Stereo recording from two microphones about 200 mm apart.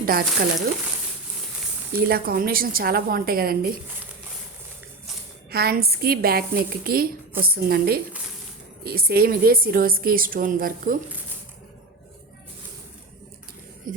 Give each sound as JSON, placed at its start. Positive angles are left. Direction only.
{"t": 0.0, "sound": "speech", "side_deg": -50}
{"t": 1.9, "sound": "a woman's voice", "side_deg": -50}
{"t": 5.5, "sound": "a woman's voice", "side_deg": -50}
{"t": 13.9, "sound": "a woman's voice", "side_deg": -45}